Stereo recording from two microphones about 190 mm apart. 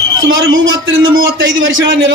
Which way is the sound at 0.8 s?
80° right.